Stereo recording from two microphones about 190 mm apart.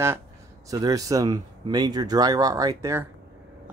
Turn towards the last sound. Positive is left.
turn(degrees=-15)  # may be behind; listen again after turning